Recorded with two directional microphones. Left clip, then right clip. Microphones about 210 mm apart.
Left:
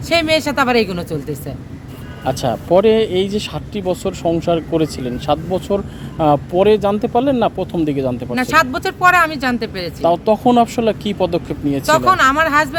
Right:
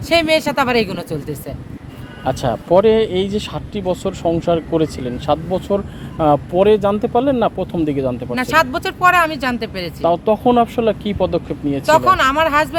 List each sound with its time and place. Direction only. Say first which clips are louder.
0.1 s speech: right 1 dB; 5° right (ahead or behind)